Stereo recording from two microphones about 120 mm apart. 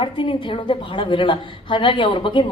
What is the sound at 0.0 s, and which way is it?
A woman's voice, 45° left (ahead or behind).